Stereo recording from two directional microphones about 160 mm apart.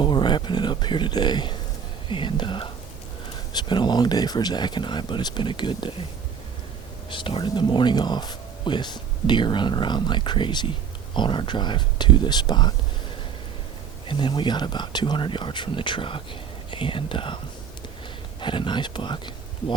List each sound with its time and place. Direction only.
0.0 s speech: 30° left (ahead or behind)
7.1 s speech: 30° left (ahead or behind)
14.1 s speech: 30° left (ahead or behind)